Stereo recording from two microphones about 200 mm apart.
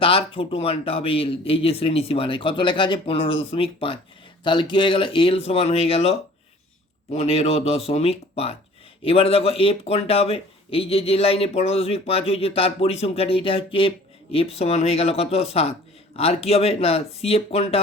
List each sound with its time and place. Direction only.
0.0 s speech: 25° left (ahead or behind)